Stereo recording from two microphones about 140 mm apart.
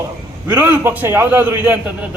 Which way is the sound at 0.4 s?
10° right (ahead or behind).